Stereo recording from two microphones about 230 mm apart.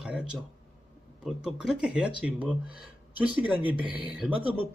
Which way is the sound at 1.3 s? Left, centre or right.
Centre.